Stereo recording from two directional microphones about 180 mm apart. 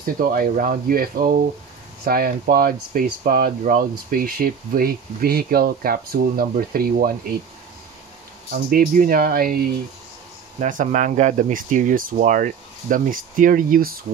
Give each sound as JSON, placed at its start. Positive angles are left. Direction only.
{"t": 0.0, "sound": "speech", "side_deg": -55}
{"t": 8.6, "sound": "speech", "side_deg": -55}
{"t": 10.6, "sound": "speech", "side_deg": -45}